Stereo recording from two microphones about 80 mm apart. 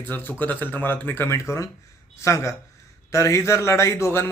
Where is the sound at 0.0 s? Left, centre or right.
Left.